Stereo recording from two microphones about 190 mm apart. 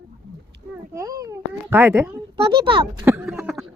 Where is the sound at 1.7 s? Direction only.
10° right (ahead or behind).